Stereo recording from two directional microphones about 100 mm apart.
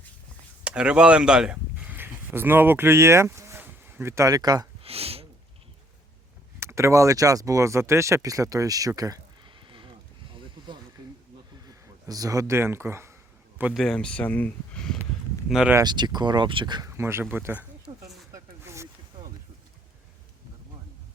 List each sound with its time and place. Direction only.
0.6 s speech: 10° right (ahead or behind); by 4.7 s 40° right (ahead or behind)
4.8 s a sound: 80° right
6.6 s speech: 25° right (ahead or behind)
9.6 s horse: 55° right (ahead or behind)
11.0 s a sound: 45° right (ahead or behind)
11.6 s speech: 40° right (ahead or behind)
13.7 s speech: 5° left (ahead or behind)
15.4 s speech: 5° right (ahead or behind)
15.8 s speech: 45° right (ahead or behind)
16.8 s speech: 25° right (ahead or behind)
17.9 s a sound: 60° right (ahead or behind)
18.6 s zipper: 30° right (ahead or behind)